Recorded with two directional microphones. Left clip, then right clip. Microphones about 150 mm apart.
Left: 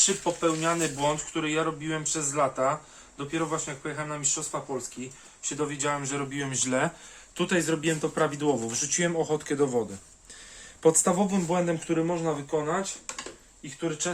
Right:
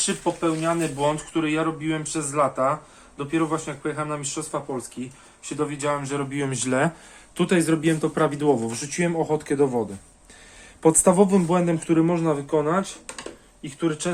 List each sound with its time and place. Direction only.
0.3 s speech: centre (ahead or behind)
10.8 s speech: 15° right (ahead or behind); by 14.1 s 35° right (ahead or behind)